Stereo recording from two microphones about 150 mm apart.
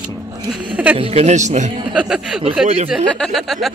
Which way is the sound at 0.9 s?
40° right (ahead or behind).